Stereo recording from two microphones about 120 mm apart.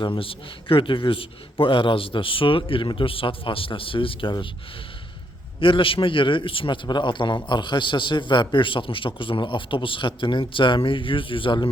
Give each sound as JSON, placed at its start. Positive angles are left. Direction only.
{"t": 0.0, "sound": "a man's voice", "side_deg": 45}
{"t": 5.5, "sound": "a man's voice", "side_deg": 45}